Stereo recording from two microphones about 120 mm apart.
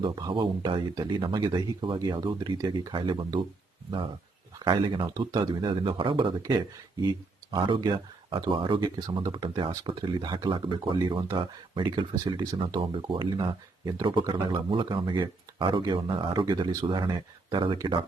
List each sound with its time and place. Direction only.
0.0 s speech: 40° right (ahead or behind)
4.6 s speech: 45° right (ahead or behind)